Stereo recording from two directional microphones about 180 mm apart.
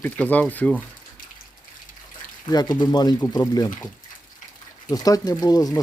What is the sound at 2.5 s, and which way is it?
Speech, 20° left (ahead or behind).